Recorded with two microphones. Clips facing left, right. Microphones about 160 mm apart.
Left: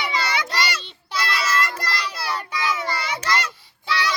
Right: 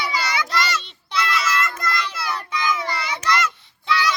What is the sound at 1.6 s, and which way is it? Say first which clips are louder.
Child singing: right 2 dB; 35° left (ahead or behind).